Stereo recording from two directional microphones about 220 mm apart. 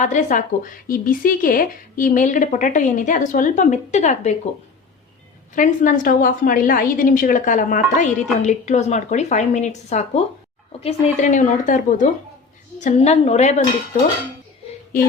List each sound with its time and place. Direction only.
0.0 s a woman's voice: 35° left (ahead or behind)
5.5 s a woman's voice: 35° left (ahead or behind)